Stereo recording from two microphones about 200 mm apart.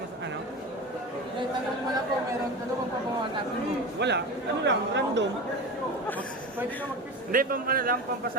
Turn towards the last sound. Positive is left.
turn(degrees=-45)  # may be behind; listen again after turning